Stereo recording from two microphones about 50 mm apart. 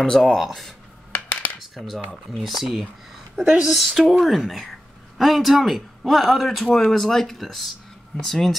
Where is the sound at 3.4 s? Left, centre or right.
Centre.